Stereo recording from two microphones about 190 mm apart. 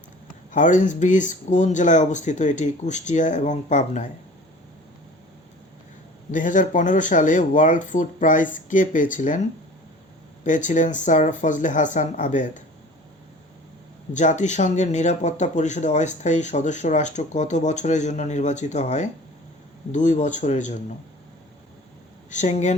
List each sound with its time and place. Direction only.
0.5 s speech: 40° left (ahead or behind)
6.3 s speech: 40° left (ahead or behind)
14.1 s speech: 40° left (ahead or behind)
22.3 s speech: 40° left (ahead or behind)